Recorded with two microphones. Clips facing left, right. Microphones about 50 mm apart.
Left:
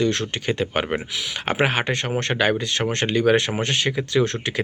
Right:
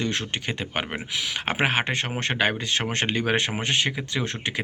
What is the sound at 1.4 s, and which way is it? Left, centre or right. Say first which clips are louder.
Speech: left 3 dB; centre.